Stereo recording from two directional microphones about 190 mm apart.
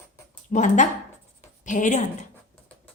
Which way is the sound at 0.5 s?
40° left (ahead or behind).